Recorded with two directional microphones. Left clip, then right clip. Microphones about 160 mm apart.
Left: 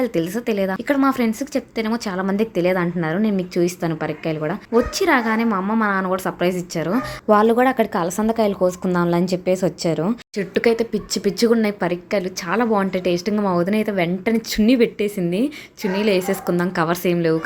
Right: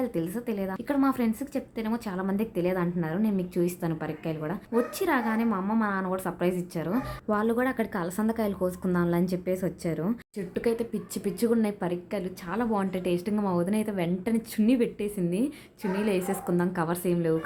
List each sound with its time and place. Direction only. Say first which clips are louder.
0.0 s a woman's voice: left 9 dB; 25° left (ahead or behind)